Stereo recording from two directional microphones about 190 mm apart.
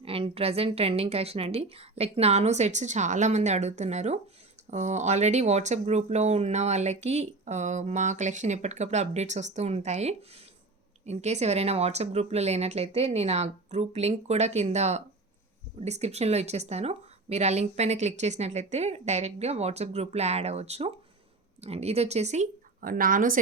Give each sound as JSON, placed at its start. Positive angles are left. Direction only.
{"t": 0.0, "sound": "a woman's voice", "side_deg": -30}